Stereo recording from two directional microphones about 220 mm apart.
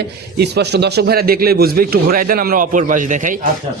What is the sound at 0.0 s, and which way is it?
A man's voice, 50° right (ahead or behind).